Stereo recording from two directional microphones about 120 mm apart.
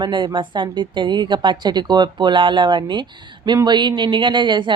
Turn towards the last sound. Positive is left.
turn(degrees=-40)  # may be behind; listen again after turning